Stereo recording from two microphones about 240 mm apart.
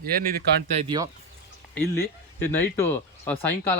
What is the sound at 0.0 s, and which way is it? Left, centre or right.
Speech, right.